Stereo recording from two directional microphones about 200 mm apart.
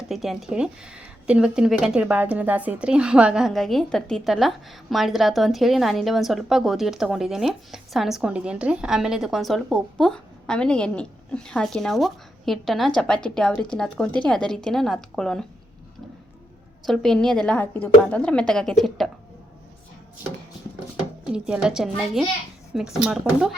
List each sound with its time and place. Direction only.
0.1 s a woman's voice: centre (ahead or behind)
16.8 s a woman's voice: centre (ahead or behind)
21.3 s a woman's voice: 5° right (ahead or behind)